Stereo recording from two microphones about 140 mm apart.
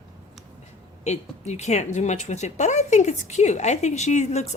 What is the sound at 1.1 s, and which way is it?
Speech, 50° left (ahead or behind).